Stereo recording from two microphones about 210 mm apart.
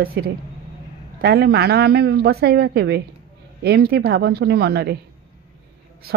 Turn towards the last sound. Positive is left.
turn(degrees=-50)  # may be behind; listen again after turning